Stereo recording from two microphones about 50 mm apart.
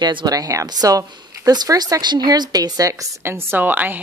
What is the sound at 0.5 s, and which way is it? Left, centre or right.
Speech, right.